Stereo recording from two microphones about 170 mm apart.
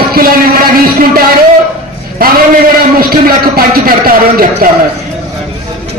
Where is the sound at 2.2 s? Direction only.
60° right (ahead or behind).